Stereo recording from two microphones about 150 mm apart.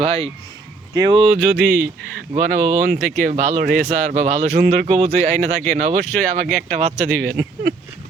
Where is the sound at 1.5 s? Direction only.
90° right.